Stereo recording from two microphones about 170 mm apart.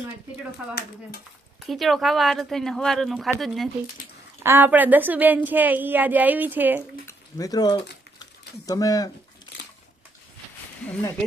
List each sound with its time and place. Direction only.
0.6 s a woman's voice: 10° right (ahead or behind)
4.4 s a woman's voice: 10° right (ahead or behind)
7.1 s speech: 20° left (ahead or behind)
8.2 s a sound: 20° left (ahead or behind)